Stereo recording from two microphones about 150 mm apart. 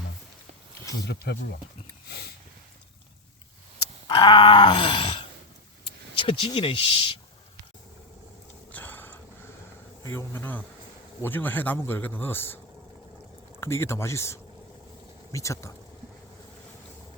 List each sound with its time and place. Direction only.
1.0 s speech: 90° left
2.0 s a sound: 90° left
4.0 s groan: 30° left (ahead or behind)
5.8 s speech: 35° left (ahead or behind)
8.7 s a sound: 10° left (ahead or behind)
10.0 s speech: 15° left (ahead or behind)
13.6 s speech: 15° left (ahead or behind)